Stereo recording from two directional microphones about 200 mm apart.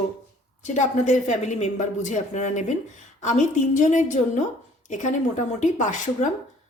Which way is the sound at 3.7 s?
40° left (ahead or behind).